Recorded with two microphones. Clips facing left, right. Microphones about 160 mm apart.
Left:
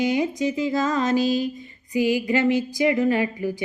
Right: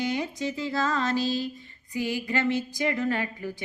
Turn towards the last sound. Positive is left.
turn(degrees=15)  # may be behind; listen again after turning